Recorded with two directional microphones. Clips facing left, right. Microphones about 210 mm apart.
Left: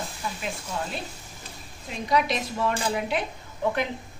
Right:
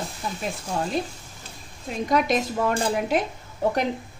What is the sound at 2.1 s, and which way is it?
Speech, 50° right (ahead or behind).